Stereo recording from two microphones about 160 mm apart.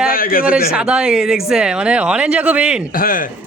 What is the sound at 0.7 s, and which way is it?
Speech, 5° right (ahead or behind).